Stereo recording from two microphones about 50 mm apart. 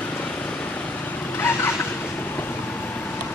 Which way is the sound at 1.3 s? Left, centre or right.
Left.